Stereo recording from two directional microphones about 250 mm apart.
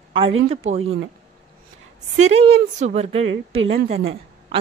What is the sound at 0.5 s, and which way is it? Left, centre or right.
Speech, right.